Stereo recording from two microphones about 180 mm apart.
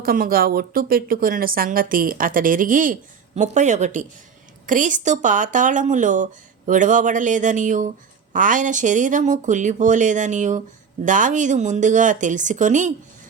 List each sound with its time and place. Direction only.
0.0 s speech: 55° right (ahead or behind)